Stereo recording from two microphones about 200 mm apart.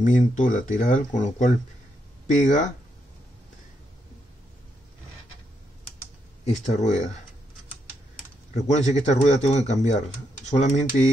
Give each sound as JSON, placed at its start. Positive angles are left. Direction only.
{"t": 0.0, "sound": "speech", "side_deg": 40}
{"t": 6.4, "sound": "speech", "side_deg": 35}
{"t": 8.5, "sound": "speech", "side_deg": 35}